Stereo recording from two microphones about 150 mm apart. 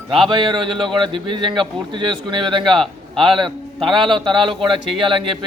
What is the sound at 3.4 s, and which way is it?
A man's voice, 35° right (ahead or behind).